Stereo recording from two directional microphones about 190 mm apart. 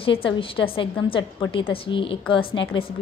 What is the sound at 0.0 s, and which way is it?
Speech, 30° left (ahead or behind).